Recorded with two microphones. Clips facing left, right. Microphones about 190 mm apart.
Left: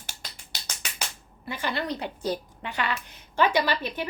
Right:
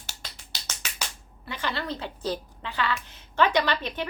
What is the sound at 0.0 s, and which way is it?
Finger snapping, 50° left (ahead or behind).